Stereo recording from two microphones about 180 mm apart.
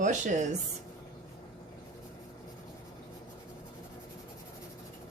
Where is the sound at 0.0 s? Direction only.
45° right (ahead or behind).